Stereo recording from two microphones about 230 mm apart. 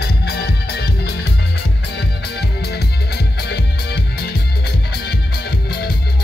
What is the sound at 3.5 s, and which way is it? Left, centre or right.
Music, left.